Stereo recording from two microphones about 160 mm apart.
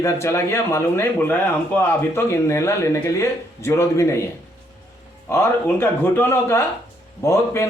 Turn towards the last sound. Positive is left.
turn(degrees=15)  # may be behind; listen again after turning